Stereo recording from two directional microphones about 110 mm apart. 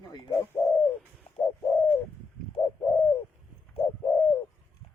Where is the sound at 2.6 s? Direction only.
35° left (ahead or behind).